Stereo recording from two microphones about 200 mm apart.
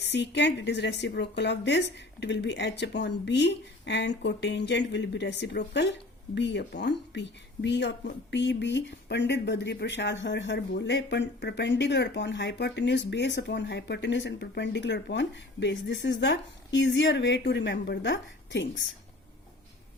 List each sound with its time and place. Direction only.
0.0 s speech: 60° left (ahead or behind)